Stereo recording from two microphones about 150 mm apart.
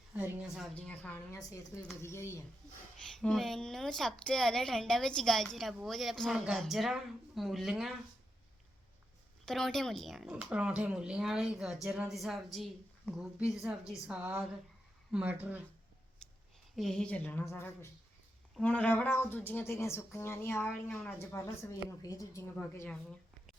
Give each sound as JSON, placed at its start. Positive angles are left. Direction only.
{"t": 0.1, "sound": "a woman's voice", "side_deg": -10}
{"t": 0.7, "sound": "speech", "side_deg": 10}
{"t": 1.3, "sound": "speech", "side_deg": 20}
{"t": 3.0, "sound": "a woman's voice", "side_deg": 5}
{"t": 9.5, "sound": "a woman's voice", "side_deg": 5}
{"t": 16.2, "sound": "a sound", "side_deg": 5}
{"t": 16.7, "sound": "speech", "side_deg": 0}